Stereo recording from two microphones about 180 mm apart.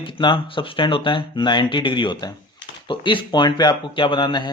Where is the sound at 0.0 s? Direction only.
25° left (ahead or behind).